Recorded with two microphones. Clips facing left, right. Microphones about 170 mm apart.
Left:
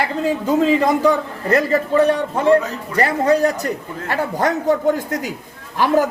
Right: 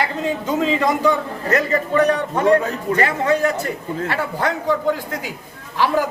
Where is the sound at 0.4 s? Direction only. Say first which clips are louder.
Left 4 dB; 35° left (ahead or behind).